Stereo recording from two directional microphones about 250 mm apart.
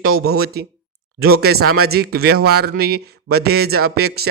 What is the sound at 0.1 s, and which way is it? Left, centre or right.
Speech, right.